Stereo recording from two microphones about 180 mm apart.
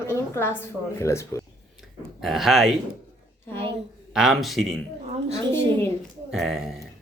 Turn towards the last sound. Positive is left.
turn(degrees=0)  # may be behind; listen again after turning